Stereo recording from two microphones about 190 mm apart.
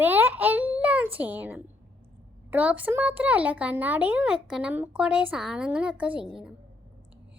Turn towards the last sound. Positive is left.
turn(degrees=-5)  # may be behind; listen again after turning